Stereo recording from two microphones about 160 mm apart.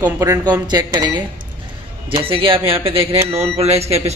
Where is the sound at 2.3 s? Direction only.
35° right (ahead or behind).